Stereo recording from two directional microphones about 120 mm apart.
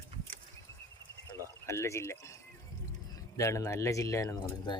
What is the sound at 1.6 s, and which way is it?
Speech, 25° left (ahead or behind).